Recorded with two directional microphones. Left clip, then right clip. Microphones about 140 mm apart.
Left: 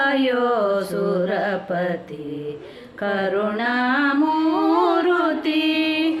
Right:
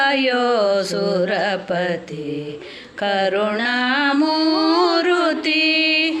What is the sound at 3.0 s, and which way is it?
Music, 20° right (ahead or behind).